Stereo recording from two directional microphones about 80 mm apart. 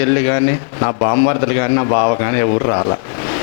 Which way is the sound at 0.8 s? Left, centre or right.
Left.